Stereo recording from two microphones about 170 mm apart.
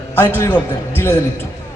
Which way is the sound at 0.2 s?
15° left (ahead or behind).